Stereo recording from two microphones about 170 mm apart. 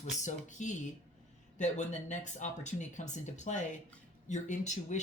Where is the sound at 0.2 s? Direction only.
45° left (ahead or behind).